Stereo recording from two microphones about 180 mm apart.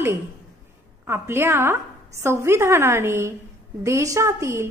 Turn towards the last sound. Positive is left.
turn(degrees=-15)  # may be behind; listen again after turning